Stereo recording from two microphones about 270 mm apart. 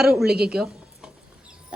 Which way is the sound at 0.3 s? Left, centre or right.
Right.